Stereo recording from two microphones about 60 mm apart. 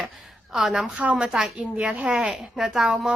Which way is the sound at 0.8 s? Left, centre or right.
Centre.